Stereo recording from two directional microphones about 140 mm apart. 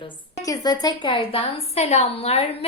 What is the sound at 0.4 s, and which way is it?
A woman's voice, 25° left (ahead or behind).